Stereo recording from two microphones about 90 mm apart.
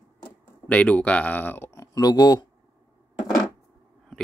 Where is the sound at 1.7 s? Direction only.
45° left (ahead or behind).